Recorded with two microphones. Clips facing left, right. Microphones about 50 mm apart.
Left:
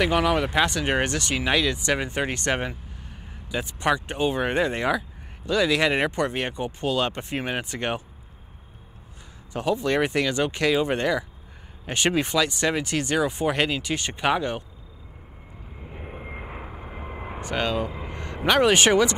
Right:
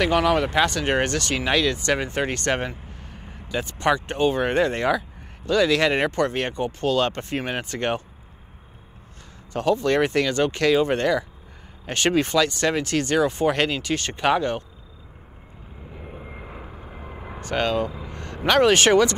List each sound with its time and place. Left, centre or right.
0.0 s speech: centre
2.7 s vehicle: right
3.4 s speech: centre
9.5 s speech: centre
15.9 s vehicle: left
16.2 s vehicle: left; by 17.9 s centre
18.1 s speech: left